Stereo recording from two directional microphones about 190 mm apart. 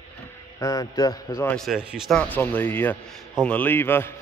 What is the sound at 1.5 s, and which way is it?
Speech, centre (ahead or behind).